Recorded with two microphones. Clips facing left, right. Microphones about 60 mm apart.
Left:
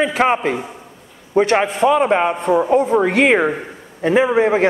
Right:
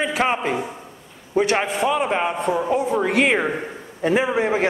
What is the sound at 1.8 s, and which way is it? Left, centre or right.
A man's voice, centre.